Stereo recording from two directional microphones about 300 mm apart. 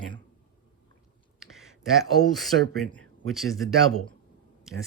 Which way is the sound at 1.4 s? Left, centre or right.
Centre.